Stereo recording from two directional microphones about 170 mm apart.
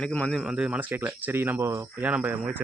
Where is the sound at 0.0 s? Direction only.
5° left (ahead or behind).